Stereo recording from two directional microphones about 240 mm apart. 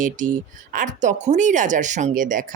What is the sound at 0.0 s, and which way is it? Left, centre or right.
Speech, right.